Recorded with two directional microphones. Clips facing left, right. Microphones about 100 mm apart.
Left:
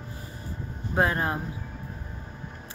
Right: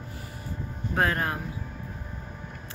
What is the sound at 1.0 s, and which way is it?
Speech, 20° left (ahead or behind).